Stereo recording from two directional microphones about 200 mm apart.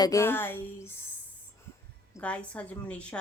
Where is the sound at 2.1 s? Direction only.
5° left (ahead or behind).